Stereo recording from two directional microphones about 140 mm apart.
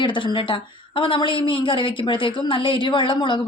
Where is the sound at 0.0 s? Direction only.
35° left (ahead or behind).